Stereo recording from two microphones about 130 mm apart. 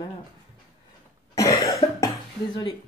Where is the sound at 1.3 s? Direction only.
25° left (ahead or behind).